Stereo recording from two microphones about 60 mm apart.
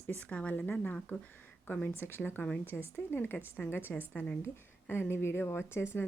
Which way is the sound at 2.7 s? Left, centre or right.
Left.